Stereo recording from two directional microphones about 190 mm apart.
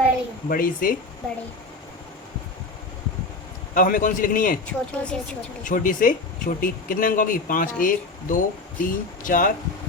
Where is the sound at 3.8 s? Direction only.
45° left (ahead or behind).